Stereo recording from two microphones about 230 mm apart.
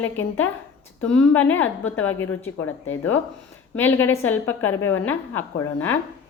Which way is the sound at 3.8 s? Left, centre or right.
Centre.